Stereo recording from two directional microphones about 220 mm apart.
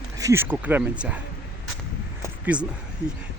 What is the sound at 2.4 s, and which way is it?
Speech, 5° right (ahead or behind).